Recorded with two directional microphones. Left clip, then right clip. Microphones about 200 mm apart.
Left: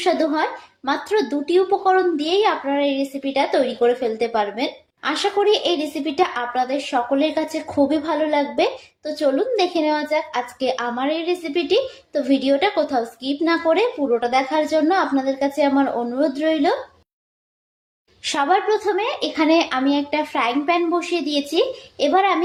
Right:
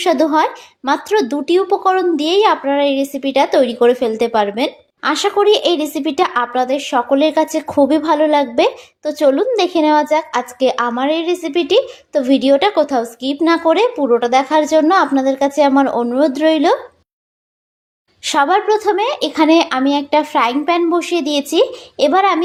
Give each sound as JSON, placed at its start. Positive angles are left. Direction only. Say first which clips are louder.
{"t": 0.0, "sound": "speech", "louder": "right 6 dB", "side_deg": -45}
{"t": 18.2, "sound": "speech", "louder": "right 5 dB", "side_deg": -45}